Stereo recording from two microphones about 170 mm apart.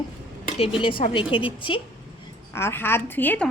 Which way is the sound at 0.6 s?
30° left (ahead or behind).